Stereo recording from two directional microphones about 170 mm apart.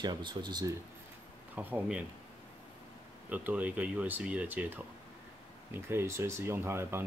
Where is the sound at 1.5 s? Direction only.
10° right (ahead or behind).